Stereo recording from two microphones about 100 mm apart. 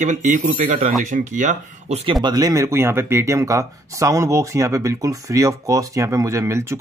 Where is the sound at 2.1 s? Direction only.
45° right (ahead or behind).